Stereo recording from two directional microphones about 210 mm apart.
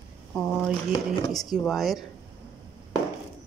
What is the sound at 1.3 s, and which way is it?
Speech, centre (ahead or behind).